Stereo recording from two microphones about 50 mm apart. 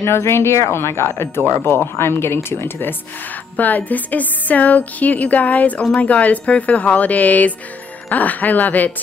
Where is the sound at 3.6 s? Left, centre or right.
Left.